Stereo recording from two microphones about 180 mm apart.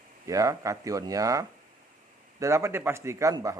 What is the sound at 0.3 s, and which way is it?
Speech, 20° right (ahead or behind).